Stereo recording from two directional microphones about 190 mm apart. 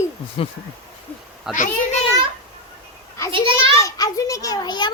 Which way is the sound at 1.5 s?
5° right (ahead or behind).